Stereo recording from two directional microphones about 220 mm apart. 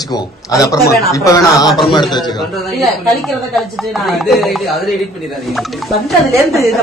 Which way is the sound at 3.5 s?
Centre (ahead or behind).